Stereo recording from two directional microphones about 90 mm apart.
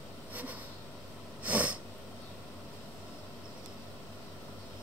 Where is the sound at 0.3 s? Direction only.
15° right (ahead or behind).